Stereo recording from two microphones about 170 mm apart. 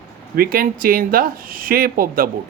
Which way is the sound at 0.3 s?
55° right (ahead or behind).